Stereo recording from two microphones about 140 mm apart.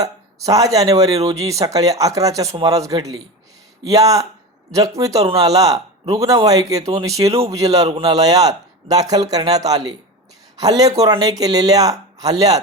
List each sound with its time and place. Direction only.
0.0 s speech: 25° right (ahead or behind)